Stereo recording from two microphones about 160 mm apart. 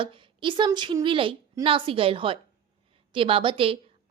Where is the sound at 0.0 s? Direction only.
30° right (ahead or behind).